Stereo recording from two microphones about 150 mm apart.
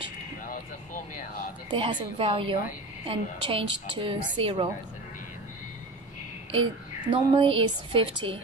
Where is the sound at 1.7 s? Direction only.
30° right (ahead or behind).